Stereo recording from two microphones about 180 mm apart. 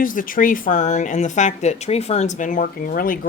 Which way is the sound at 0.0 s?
50° left (ahead or behind).